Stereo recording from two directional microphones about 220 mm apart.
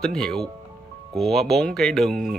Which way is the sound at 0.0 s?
Centre (ahead or behind).